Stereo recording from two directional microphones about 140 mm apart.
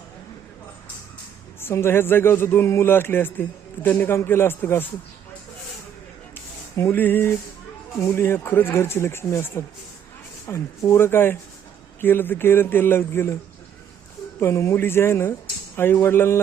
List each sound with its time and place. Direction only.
1.6 s speech: 15° left (ahead or behind)
6.3 s a sound: 15° left (ahead or behind)
8.0 s speech: 15° left (ahead or behind)